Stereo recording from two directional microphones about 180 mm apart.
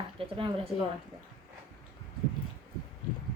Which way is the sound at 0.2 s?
30° right (ahead or behind).